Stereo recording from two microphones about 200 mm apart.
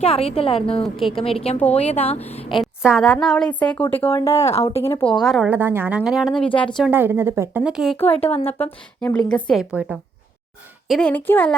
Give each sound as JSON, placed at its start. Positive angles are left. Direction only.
{"t": 0.0, "sound": "a woman's voice", "side_deg": 30}
{"t": 0.9, "sound": "a woman's voice", "side_deg": 0}
{"t": 1.2, "sound": "a woman's voice", "side_deg": 30}
{"t": 2.6, "sound": "a woman's voice", "side_deg": 0}
{"t": 4.3, "sound": "speech", "side_deg": 30}
{"t": 4.8, "sound": "a woman's voice", "side_deg": 10}
{"t": 5.2, "sound": "a woman's voice", "side_deg": 0}
{"t": 8.3, "sound": "speech", "side_deg": 30}
{"t": 8.5, "sound": "a woman's voice", "side_deg": 10}